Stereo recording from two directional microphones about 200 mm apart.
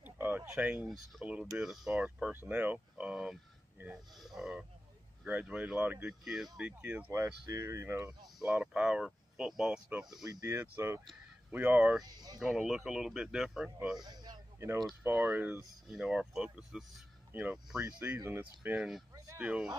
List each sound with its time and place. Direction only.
0.0 s a sound: 10° right (ahead or behind)
0.8 s speech: centre (ahead or behind)
10.0 s speech: 20° right (ahead or behind)
12.0 s speech: 20° right (ahead or behind)
12.4 s speech: 5° right (ahead or behind)
14.0 s a sound: 20° right (ahead or behind)
14.8 s speech: centre (ahead or behind)
19.1 s a sound: 15° right (ahead or behind)
19.4 s speech: 5° right (ahead or behind)